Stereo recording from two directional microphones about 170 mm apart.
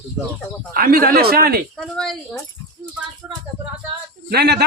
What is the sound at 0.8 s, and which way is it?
Speech, 60° right (ahead or behind).